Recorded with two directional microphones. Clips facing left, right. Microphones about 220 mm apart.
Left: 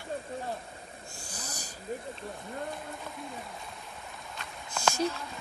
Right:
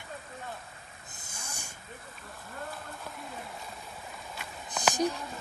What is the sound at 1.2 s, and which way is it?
Snoring, 25° right (ahead or behind).